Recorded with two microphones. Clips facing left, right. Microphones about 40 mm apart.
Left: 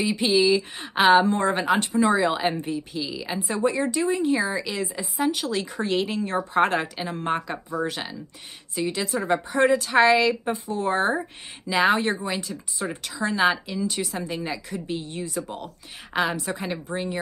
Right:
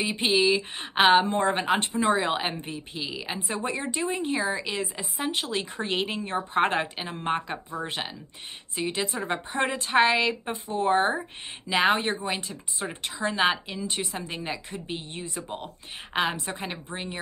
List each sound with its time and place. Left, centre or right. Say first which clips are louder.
0.0 s speech: left 3 dB; right
3.3 s speech: left 8 dB; right
4.4 s speech: left 2 dB; right